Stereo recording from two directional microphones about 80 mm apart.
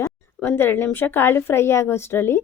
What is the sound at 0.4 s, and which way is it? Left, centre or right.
A woman's voice, left.